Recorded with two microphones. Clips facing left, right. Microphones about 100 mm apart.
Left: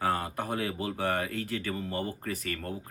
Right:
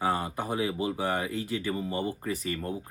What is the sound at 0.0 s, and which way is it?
Speech, 15° right (ahead or behind).